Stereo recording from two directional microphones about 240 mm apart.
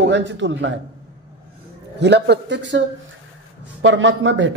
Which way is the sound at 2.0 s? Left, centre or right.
Right.